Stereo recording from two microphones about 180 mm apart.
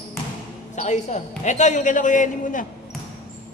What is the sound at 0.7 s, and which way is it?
A man's voice, 40° left (ahead or behind).